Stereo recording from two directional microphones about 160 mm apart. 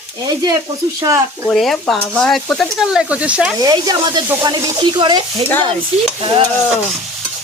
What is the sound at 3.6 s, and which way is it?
Stir, 25° right (ahead or behind).